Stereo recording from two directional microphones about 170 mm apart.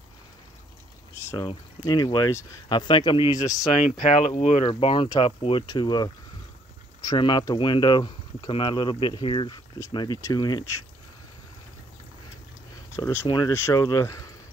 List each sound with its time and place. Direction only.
1.2 s speech: 20° left (ahead or behind)
3.8 s speech: 40° left (ahead or behind); by 10.7 s 25° left (ahead or behind)
12.9 s speech: 15° left (ahead or behind)